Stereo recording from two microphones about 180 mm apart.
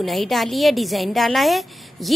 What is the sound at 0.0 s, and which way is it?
A woman's voice, centre (ahead or behind).